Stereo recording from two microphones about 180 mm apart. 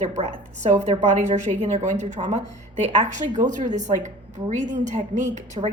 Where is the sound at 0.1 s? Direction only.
35° right (ahead or behind).